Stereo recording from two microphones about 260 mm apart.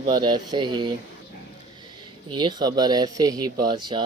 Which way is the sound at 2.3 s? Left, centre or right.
Centre.